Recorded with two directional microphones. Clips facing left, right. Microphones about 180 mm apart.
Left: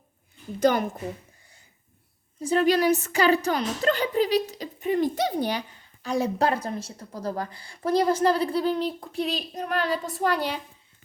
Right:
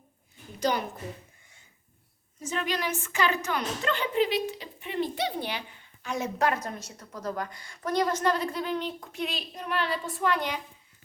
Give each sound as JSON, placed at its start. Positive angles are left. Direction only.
{"t": 0.6, "sound": "a woman's voice", "side_deg": 50}
{"t": 2.4, "sound": "a woman's voice", "side_deg": 35}